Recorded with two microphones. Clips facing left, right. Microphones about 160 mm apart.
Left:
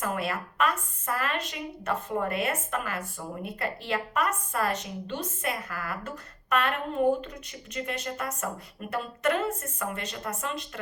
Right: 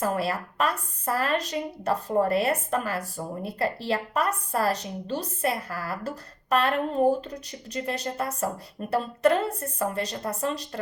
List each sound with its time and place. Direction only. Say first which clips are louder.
0.0 s a woman's voice: right 4 dB; 35° right (ahead or behind)